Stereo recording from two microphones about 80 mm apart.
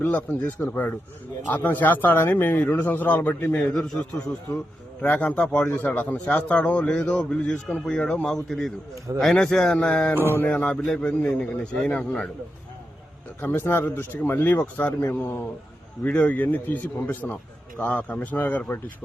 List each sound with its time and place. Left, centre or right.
0.0 s a man's voice: left
5.0 s a man's voice: centre
13.4 s a man's voice: left